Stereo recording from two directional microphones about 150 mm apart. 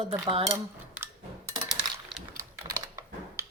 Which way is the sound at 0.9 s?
15° right (ahead or behind).